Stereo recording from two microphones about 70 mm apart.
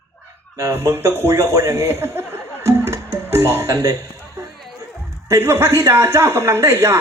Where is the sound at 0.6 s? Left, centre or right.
Right.